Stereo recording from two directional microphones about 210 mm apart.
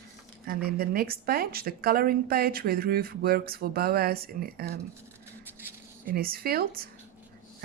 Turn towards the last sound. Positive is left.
turn(degrees=-45)  # may be behind; listen again after turning